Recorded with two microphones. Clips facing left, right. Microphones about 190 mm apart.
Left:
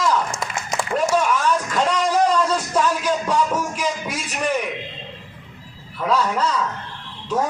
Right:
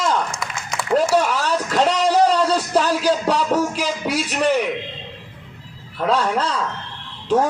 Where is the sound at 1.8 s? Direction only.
30° right (ahead or behind).